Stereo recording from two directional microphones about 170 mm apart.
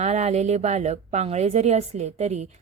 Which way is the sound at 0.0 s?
40° right (ahead or behind).